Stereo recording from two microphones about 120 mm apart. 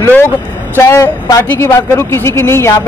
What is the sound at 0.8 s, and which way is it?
Speech, 25° left (ahead or behind).